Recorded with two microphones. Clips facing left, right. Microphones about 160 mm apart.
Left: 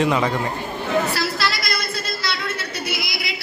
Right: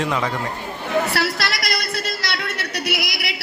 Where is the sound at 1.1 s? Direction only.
65° right (ahead or behind).